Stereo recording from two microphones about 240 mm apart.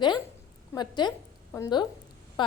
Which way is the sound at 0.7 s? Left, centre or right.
Centre.